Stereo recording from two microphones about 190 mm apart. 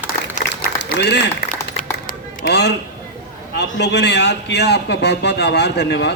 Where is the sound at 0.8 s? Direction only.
65° left (ahead or behind).